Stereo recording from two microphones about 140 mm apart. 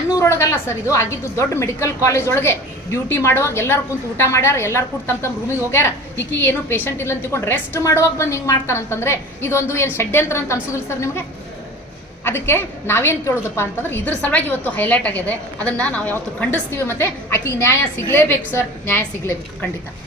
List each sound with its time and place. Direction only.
0.2 s a woman's voice: 20° left (ahead or behind)
12.2 s a woman's voice: 15° left (ahead or behind)